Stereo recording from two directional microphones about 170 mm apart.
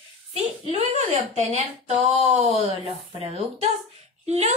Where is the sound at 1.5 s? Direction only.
35° right (ahead or behind).